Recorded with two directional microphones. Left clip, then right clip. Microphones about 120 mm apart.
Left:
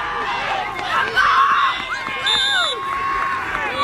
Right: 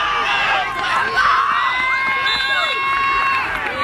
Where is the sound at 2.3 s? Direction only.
45° left (ahead or behind).